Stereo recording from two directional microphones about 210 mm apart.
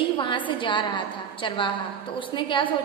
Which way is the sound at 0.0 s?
25° left (ahead or behind).